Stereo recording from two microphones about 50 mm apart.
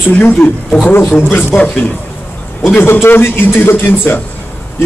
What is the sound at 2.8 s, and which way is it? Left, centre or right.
A man's voice, left.